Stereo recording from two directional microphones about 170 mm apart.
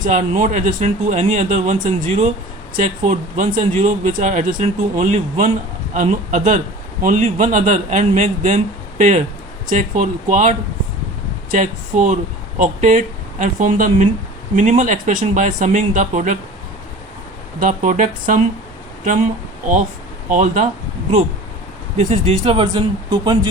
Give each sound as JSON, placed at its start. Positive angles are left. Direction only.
{"t": 0.0, "sound": "speech", "side_deg": -45}
{"t": 11.5, "sound": "speech", "side_deg": -50}
{"t": 17.6, "sound": "speech", "side_deg": -50}
{"t": 20.3, "sound": "speech", "side_deg": -50}
{"t": 21.9, "sound": "speech", "side_deg": -35}